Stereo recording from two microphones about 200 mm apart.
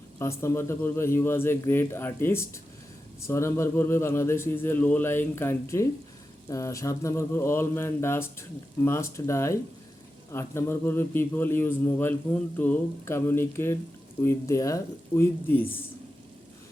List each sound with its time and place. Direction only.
0.2 s a man's voice: 15° left (ahead or behind)